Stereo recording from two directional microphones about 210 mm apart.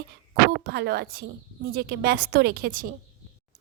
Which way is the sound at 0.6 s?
50° right (ahead or behind).